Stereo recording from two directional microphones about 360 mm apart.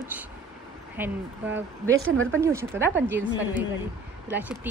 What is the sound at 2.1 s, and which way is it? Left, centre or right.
Speech, right.